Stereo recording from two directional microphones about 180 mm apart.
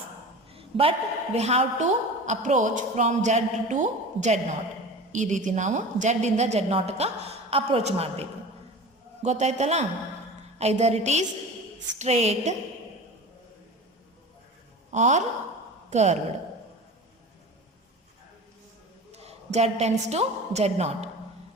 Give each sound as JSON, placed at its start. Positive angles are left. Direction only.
{"t": 0.5, "sound": "a woman's voice", "side_deg": -30}
{"t": 14.8, "sound": "a woman's voice", "side_deg": -40}
{"t": 19.1, "sound": "a woman's voice", "side_deg": -35}